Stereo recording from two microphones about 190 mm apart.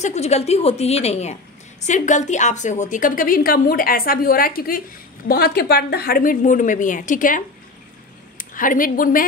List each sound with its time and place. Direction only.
0.0 s a woman's voice: 35° left (ahead or behind)